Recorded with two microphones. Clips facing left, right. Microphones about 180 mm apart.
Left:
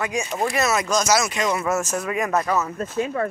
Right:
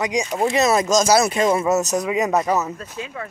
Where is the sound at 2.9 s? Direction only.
50° left (ahead or behind).